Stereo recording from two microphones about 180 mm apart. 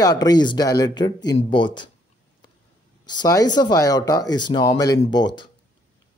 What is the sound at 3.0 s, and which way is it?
A man's voice, 20° left (ahead or behind).